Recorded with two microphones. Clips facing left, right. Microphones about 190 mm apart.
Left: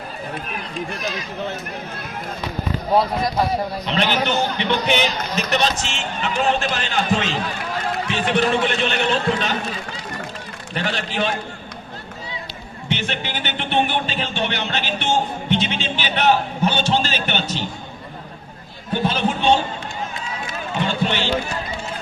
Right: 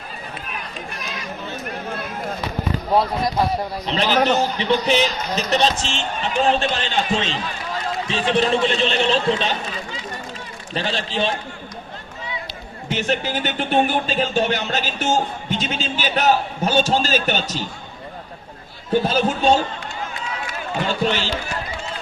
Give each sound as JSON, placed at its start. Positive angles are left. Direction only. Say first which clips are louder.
{"t": 3.8, "sound": "a man's voice", "louder": "right 4 dB", "side_deg": -35}
{"t": 10.8, "sound": "a man's voice", "louder": "right 1 dB", "side_deg": -30}
{"t": 12.9, "sound": "a man's voice", "louder": "right 4 dB", "side_deg": -40}
{"t": 19.0, "sound": "a man's voice", "louder": "left 1 dB", "side_deg": -40}
{"t": 20.8, "sound": "a man's voice", "louder": "right 1 dB", "side_deg": -40}